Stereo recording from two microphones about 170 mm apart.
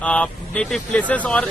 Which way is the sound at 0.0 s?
10° left (ahead or behind).